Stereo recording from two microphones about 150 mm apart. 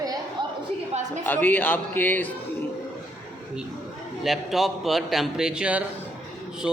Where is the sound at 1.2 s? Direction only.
10° left (ahead or behind).